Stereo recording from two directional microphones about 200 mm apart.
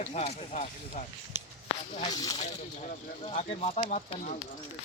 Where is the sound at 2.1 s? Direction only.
20° left (ahead or behind).